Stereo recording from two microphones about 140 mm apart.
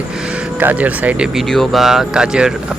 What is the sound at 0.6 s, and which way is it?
Speech, 10° right (ahead or behind).